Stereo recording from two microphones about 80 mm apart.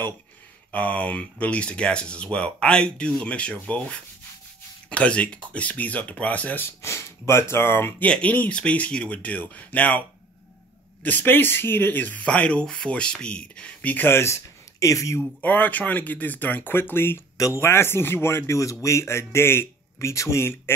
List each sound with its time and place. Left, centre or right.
0.7 s speech: centre
6.8 s speech: left
8.0 s speech: centre; by 15.2 s left
15.4 s speech: left